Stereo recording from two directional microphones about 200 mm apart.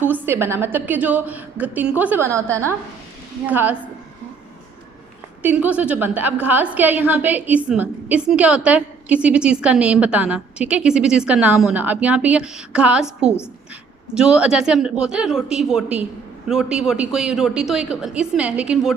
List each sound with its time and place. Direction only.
0.1 s a woman's voice: 10° right (ahead or behind)
3.4 s a woman's voice: 10° right (ahead or behind)
5.4 s a woman's voice: 5° right (ahead or behind)